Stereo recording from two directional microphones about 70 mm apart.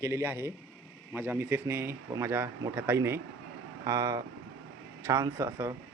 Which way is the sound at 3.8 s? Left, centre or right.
Right.